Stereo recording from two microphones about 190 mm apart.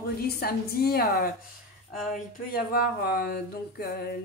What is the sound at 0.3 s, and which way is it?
A woman's voice, 55° left (ahead or behind).